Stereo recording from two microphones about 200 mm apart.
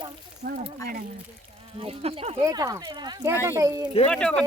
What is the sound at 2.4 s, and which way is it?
Speech, 15° right (ahead or behind).